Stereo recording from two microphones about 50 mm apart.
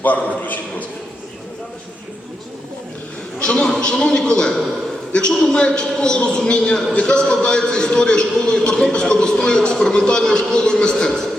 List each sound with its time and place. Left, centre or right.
0.4 s a man's voice: left
3.4 s a man's voice: centre